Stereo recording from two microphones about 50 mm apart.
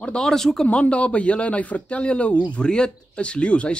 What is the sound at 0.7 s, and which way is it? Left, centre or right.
Speech, left.